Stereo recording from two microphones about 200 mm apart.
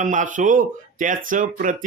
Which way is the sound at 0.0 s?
40° right (ahead or behind).